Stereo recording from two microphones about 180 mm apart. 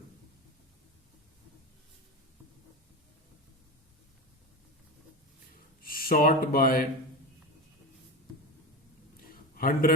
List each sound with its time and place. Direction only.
5.8 s speech: 55° left (ahead or behind)
9.6 s a man's voice: 50° left (ahead or behind)